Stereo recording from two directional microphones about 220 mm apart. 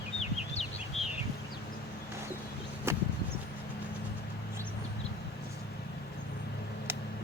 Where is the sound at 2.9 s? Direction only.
10° right (ahead or behind).